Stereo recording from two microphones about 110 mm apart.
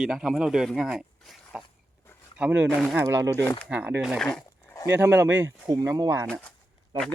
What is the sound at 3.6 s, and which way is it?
Speech, 15° right (ahead or behind).